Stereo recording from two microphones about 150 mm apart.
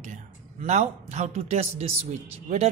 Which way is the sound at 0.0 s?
50° right (ahead or behind).